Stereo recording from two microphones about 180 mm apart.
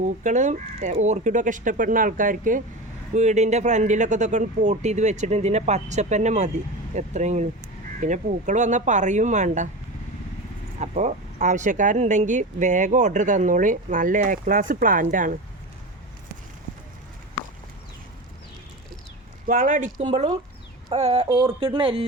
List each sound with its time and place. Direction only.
0.0 s speech: 45° right (ahead or behind)
10.8 s speech: 40° right (ahead or behind)
19.5 s speech: 45° right (ahead or behind)
20.1 s speech: 30° right (ahead or behind)